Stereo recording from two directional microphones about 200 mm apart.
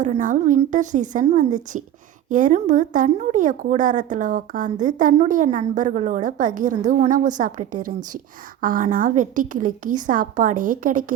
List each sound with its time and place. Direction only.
0.0 s a woman's voice: 40° right (ahead or behind)